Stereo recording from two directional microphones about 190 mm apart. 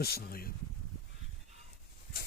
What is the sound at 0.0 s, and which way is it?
Speech, 55° left (ahead or behind).